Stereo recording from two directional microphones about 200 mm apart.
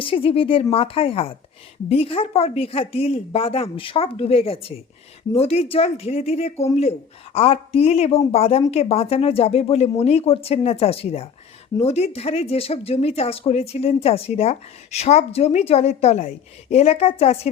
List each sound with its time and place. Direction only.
0.0 s speech: 25° left (ahead or behind)